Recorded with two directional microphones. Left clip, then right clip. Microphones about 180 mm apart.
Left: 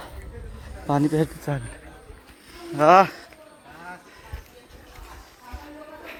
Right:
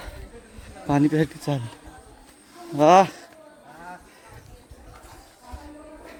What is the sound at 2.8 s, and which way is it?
Speech, 30° right (ahead or behind).